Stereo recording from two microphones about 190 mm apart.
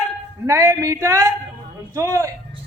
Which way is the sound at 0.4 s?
10° right (ahead or behind).